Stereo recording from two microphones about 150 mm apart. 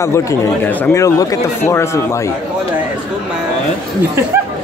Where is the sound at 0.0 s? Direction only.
20° left (ahead or behind).